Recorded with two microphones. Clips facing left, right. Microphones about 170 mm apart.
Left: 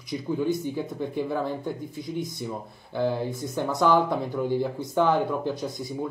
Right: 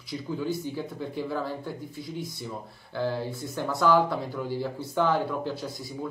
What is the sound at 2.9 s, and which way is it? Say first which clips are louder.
Speech: left 3 dB; 15° left (ahead or behind).